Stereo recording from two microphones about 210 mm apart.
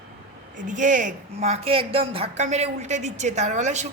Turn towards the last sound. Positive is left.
turn(degrees=-35)  # may be behind; listen again after turning